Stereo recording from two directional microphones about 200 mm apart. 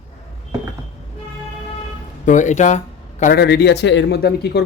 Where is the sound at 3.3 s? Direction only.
55° left (ahead or behind).